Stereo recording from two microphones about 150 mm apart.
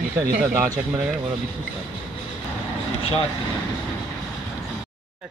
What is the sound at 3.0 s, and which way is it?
Vehicle, 40° left (ahead or behind).